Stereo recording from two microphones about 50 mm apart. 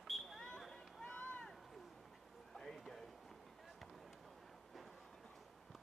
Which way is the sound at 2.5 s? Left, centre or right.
Centre.